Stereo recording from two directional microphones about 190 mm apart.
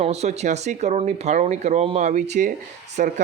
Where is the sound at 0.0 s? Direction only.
35° right (ahead or behind).